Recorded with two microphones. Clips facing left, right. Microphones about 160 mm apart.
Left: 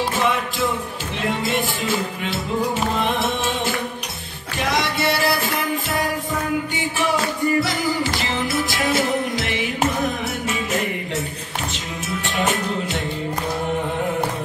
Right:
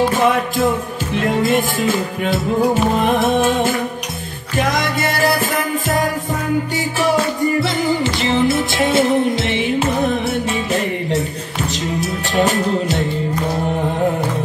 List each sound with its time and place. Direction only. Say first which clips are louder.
2.2 s music: right 10 dB; 50° right (ahead or behind)
7.6 s music: right 5 dB; 25° right (ahead or behind)